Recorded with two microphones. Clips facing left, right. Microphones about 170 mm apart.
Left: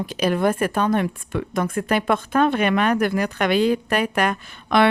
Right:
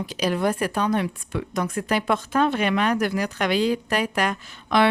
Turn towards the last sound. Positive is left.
turn(degrees=55)  # may be behind; listen again after turning